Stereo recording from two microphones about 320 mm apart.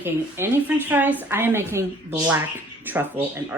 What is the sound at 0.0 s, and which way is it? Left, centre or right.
A woman's voice, centre.